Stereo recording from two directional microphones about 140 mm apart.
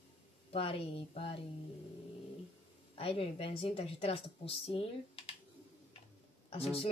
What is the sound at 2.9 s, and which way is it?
Speech, 45° left (ahead or behind).